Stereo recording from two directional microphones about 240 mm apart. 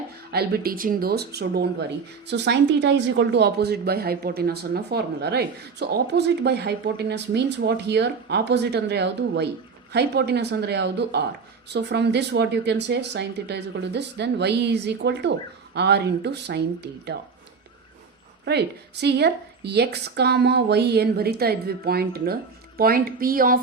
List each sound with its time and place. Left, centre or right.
0.3 s speech: right
18.4 s speech: right